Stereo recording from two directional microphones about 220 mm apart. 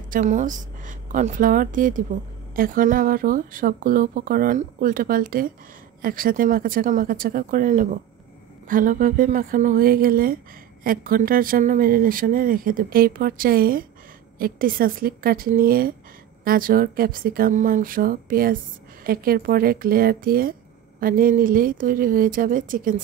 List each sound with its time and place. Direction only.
0.1 s a woman's voice: 35° right (ahead or behind)